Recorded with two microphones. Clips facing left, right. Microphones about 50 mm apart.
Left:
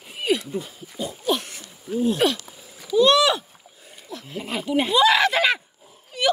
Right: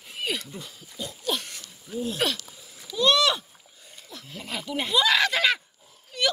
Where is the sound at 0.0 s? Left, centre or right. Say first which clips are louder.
Left 7 dB; centre.